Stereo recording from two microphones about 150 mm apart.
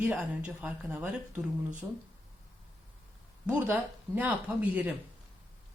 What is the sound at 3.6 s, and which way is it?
Speech, 10° right (ahead or behind).